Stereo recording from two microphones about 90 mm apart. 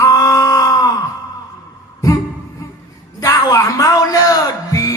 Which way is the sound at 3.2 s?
40° left (ahead or behind).